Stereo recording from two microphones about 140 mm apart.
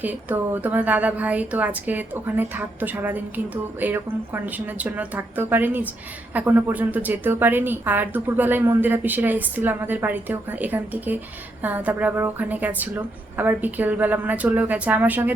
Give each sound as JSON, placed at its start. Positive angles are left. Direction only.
{"t": 0.0, "sound": "a woman's voice", "side_deg": -10}